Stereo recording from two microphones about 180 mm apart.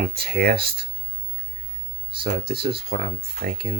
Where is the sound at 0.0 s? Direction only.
60° right (ahead or behind).